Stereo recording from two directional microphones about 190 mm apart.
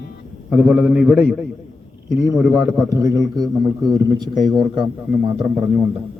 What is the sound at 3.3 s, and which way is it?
A man's voice, centre (ahead or behind).